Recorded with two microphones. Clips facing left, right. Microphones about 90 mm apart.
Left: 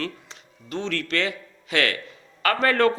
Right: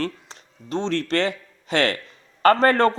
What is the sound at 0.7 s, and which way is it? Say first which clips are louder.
A man's voice: right 4 dB; 30° right (ahead or behind).